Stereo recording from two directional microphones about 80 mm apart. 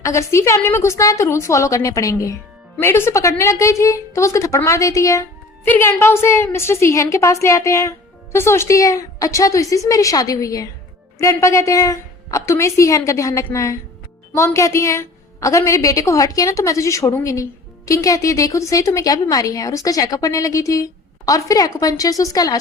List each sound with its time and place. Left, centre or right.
0.0 s a woman's voice: left
2.8 s a woman's voice: left
5.6 s a woman's voice: left